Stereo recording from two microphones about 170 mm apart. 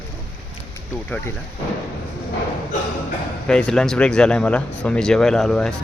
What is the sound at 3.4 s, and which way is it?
Speech, 5° left (ahead or behind).